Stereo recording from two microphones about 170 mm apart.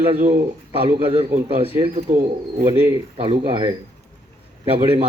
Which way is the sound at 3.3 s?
30° right (ahead or behind).